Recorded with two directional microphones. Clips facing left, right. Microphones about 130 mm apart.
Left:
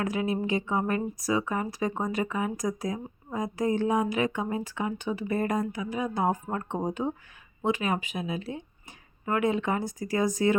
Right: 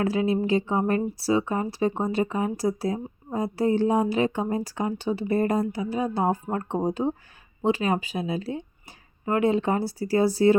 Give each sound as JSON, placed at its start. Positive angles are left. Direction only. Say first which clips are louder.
{"t": 0.0, "sound": "a woman's voice", "louder": "right 5 dB", "side_deg": -30}